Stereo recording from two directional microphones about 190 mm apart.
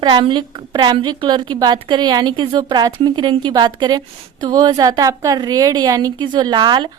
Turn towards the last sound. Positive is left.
turn(degrees=-25)  # may be behind; listen again after turning